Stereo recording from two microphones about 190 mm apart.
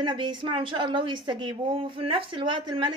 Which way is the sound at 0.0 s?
25° right (ahead or behind).